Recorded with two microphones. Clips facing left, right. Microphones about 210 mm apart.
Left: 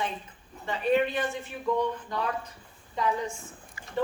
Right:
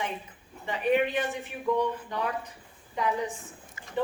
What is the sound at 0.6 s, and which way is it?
A woman's voice, 15° right (ahead or behind).